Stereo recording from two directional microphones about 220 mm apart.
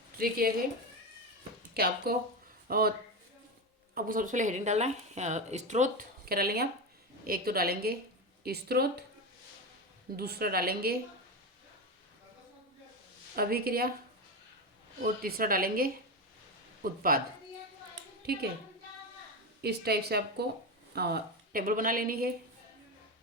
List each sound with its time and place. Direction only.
0.2 s speech: 40° right (ahead or behind)
1.7 s a woman's voice: 45° right (ahead or behind)
3.9 s a woman's voice: 40° right (ahead or behind)
10.2 s a woman's voice: 45° right (ahead or behind)
13.3 s a woman's voice: 45° right (ahead or behind)
15.0 s speech: 40° right (ahead or behind)
19.6 s a woman's voice: 45° right (ahead or behind)